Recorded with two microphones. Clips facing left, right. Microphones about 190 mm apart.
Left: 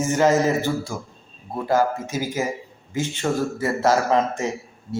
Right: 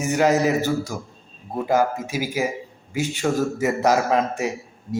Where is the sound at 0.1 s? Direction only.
15° right (ahead or behind).